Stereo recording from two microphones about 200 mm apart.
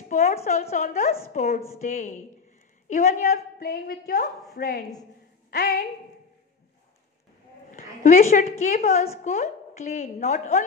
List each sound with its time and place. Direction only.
0.1 s a woman's voice: 35° left (ahead or behind); by 5.9 s 55° left (ahead or behind)
7.7 s a woman's voice: 35° left (ahead or behind)